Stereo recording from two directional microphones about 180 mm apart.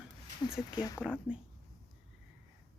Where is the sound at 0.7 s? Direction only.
20° left (ahead or behind).